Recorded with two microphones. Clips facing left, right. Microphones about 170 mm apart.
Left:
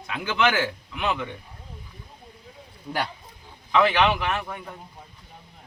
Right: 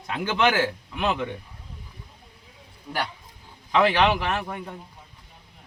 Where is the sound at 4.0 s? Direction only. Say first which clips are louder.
Even; 35° right (ahead or behind).